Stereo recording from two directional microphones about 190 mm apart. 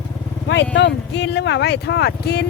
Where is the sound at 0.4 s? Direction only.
65° left (ahead or behind).